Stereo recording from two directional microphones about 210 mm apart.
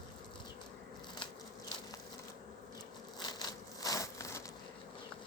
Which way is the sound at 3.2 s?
20° left (ahead or behind).